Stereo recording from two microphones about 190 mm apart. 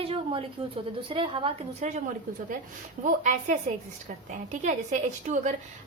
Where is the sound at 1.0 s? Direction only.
25° right (ahead or behind).